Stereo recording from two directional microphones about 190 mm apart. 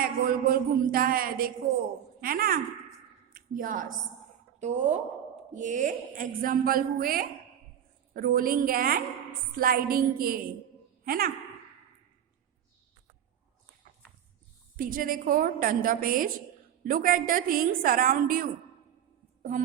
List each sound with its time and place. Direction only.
0.0 s a woman's voice: 50° right (ahead or behind)
13.8 s dog: 45° right (ahead or behind)
14.8 s a woman's voice: 45° right (ahead or behind)